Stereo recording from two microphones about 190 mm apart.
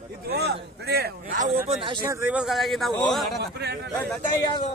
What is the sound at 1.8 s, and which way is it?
Speech, 25° right (ahead or behind).